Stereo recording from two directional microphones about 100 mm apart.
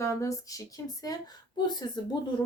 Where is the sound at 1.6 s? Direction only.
45° left (ahead or behind).